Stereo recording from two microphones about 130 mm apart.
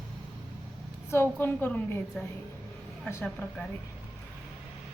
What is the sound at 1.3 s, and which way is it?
Speech, 15° left (ahead or behind).